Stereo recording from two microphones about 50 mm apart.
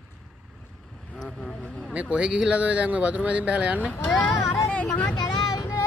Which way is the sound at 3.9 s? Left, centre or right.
Left.